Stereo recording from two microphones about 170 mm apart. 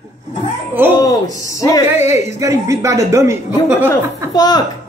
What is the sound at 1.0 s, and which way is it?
Speech, 20° left (ahead or behind).